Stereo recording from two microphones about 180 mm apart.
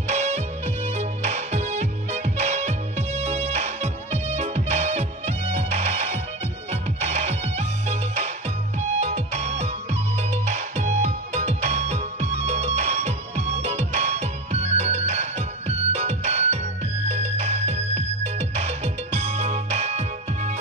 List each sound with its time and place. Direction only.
0.0 s music: 40° right (ahead or behind)